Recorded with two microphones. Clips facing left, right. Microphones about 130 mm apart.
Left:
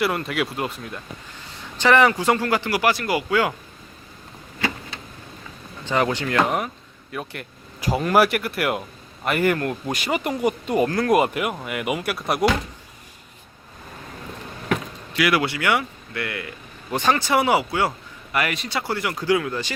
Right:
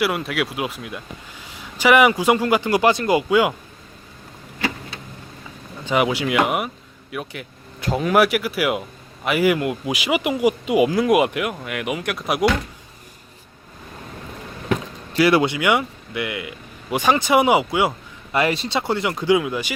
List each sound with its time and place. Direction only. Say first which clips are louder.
0.0 s speech: right 1 dB; centre (ahead or behind)
5.8 s speech: right 2 dB; 15° right (ahead or behind)
15.1 s speech: right 5 dB; 30° right (ahead or behind)
18.3 s speech: right 4 dB; 30° right (ahead or behind)